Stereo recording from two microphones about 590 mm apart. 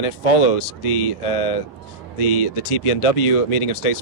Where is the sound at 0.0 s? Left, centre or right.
Left.